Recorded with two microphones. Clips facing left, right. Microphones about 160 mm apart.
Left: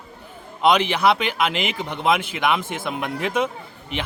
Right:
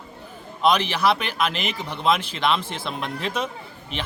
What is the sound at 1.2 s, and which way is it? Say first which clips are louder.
A man's voice: left 3 dB; 15° left (ahead or behind).